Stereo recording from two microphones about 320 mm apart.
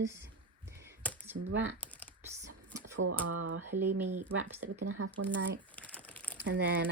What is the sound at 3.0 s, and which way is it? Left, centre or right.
Speech, right.